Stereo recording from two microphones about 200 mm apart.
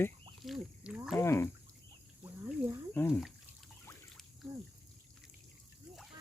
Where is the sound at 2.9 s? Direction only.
10° left (ahead or behind).